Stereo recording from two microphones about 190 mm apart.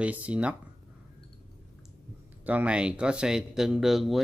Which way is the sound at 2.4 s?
10° right (ahead or behind).